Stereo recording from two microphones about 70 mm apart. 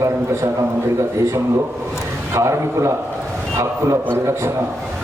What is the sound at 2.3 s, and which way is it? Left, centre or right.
Speech, right.